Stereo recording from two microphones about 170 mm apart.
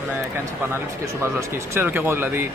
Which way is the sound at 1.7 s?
10° right (ahead or behind).